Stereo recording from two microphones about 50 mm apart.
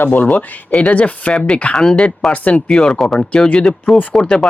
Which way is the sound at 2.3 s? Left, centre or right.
Left.